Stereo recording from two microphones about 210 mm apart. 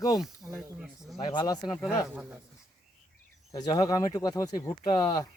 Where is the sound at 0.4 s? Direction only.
15° right (ahead or behind).